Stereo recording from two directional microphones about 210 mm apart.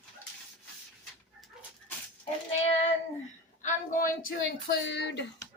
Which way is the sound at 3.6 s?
35° left (ahead or behind).